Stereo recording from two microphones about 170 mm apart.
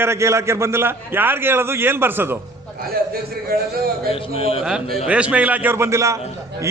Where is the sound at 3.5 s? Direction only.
65° right (ahead or behind).